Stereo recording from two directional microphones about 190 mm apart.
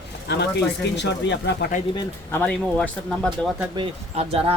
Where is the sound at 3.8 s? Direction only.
30° right (ahead or behind).